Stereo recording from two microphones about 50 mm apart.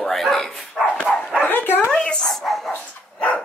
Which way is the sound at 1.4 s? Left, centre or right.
Left.